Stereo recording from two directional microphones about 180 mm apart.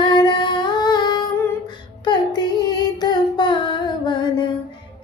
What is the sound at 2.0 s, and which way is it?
Child singing, 25° left (ahead or behind).